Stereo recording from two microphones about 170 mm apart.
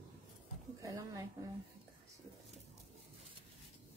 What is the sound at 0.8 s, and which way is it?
Speech, 20° right (ahead or behind).